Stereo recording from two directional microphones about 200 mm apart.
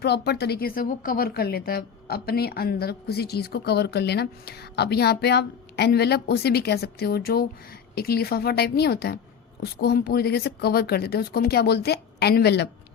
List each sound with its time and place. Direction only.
0.0 s a woman's voice: 55° left (ahead or behind)